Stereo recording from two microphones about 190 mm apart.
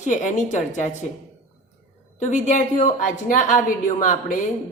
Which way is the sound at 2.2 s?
40° left (ahead or behind).